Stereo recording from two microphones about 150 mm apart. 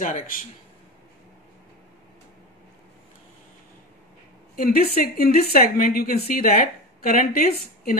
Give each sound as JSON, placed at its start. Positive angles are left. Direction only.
{"t": 0.0, "sound": "a man's voice", "side_deg": 60}
{"t": 4.6, "sound": "a woman's voice", "side_deg": 75}
{"t": 4.9, "sound": "a woman's voice", "side_deg": 90}